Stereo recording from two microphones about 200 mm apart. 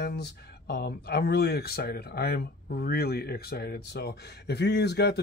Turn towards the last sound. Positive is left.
turn(degrees=55)  # may be behind; listen again after turning